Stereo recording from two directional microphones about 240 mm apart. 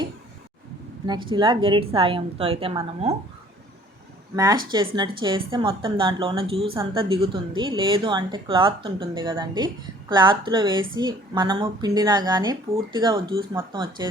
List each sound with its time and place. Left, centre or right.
1.0 s speech: centre
4.4 s speech: centre